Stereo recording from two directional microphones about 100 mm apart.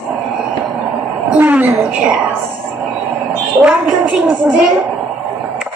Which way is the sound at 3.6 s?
10° right (ahead or behind).